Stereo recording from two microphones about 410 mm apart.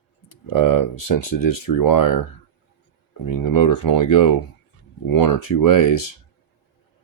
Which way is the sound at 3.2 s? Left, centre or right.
Left.